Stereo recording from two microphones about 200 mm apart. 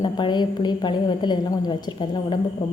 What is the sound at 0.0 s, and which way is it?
A woman's voice, 20° left (ahead or behind).